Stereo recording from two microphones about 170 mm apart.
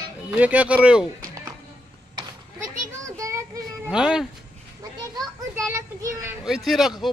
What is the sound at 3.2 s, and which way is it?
Child singing, 20° right (ahead or behind).